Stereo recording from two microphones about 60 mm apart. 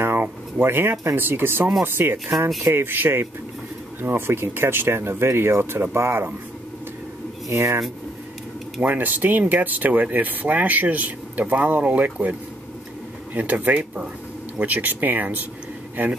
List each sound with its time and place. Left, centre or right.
0.0 s a sound: right
1.1 s speech: right
7.5 s speech: right
8.8 s speech: right